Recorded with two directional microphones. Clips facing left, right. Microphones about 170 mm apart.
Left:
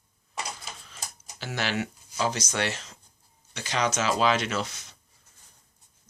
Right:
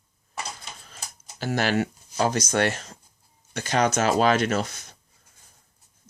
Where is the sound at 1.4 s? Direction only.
45° right (ahead or behind).